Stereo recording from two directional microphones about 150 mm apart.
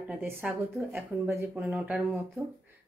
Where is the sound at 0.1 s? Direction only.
10° right (ahead or behind).